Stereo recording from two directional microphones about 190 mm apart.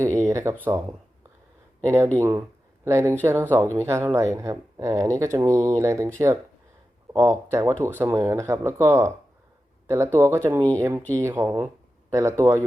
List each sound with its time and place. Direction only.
0.0 s speech: 15° right (ahead or behind)
2.1 s speech: 10° right (ahead or behind)
7.1 s speech: 15° right (ahead or behind)